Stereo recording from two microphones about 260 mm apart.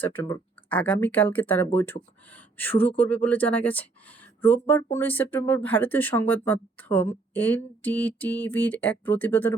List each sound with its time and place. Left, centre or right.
0.0 s speech: centre